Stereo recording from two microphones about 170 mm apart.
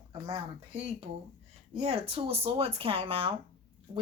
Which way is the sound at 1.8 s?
35° right (ahead or behind).